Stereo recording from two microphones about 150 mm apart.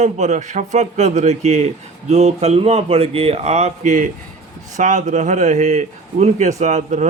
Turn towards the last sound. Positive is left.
turn(degrees=-50)  # may be behind; listen again after turning